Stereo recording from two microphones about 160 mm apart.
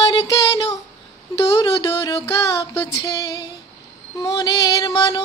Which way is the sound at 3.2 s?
25° left (ahead or behind).